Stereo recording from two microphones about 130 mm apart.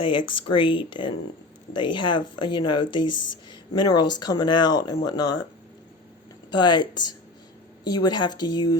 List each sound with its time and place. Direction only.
0.0 s speech: 40° left (ahead or behind)
6.5 s speech: 35° left (ahead or behind)